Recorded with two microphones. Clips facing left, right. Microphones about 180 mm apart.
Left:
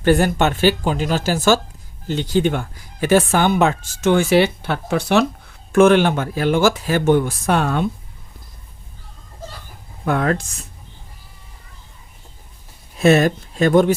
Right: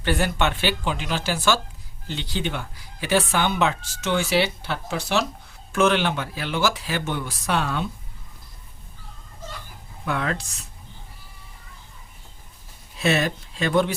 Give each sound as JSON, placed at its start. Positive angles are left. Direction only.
{"t": 0.0, "sound": "speech", "side_deg": 45}
{"t": 10.1, "sound": "speech", "side_deg": 45}
{"t": 13.0, "sound": "speech", "side_deg": 45}